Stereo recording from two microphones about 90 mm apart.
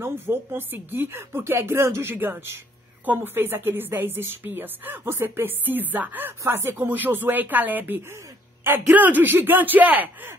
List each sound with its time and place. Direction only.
0.0 s a woman's voice: 25° right (ahead or behind)